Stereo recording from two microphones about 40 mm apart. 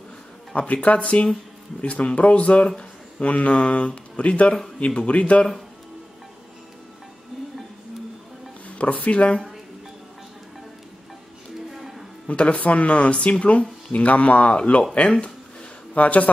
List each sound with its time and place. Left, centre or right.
0.6 s speech: left
8.6 s speech: left
11.7 s a sound: centre
12.3 s speech: left
15.0 s speech: left
15.9 s a man's voice: left